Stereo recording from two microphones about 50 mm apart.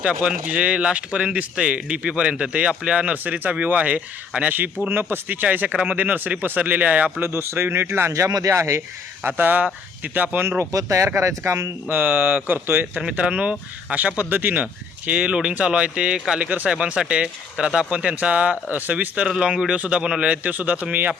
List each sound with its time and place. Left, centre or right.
0.0 s speech: right
3.2 s speech: right
7.2 s speech: right
8.1 s speech: right
9.2 s speech: right
10.6 s speech: right
11.9 s speech: right
13.0 s speech: centre